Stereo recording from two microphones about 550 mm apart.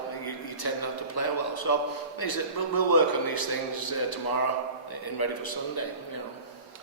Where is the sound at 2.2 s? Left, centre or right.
Left.